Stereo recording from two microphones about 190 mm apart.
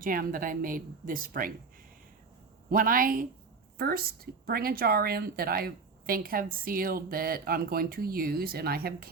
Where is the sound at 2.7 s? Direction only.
50° right (ahead or behind).